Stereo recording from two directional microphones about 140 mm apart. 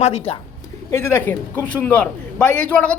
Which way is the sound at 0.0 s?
50° left (ahead or behind).